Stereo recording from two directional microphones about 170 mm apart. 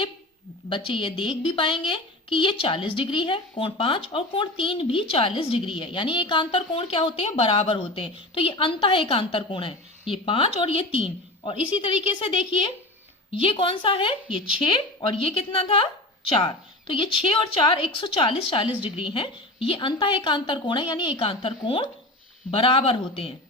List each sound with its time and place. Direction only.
0.7 s a woman's voice: 30° left (ahead or behind)
14.3 s speech: 5° right (ahead or behind)
14.6 s a woman's voice: 30° left (ahead or behind)